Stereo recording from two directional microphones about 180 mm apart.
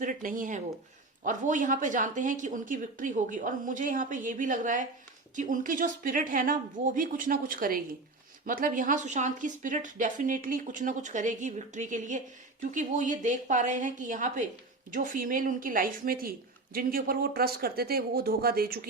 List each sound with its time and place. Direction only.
0.0 s a woman's voice: 50° right (ahead or behind)